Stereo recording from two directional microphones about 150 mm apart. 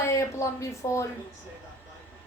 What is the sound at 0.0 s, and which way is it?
Speech, 20° left (ahead or behind).